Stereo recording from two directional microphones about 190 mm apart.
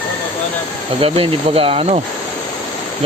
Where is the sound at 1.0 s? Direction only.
30° right (ahead or behind).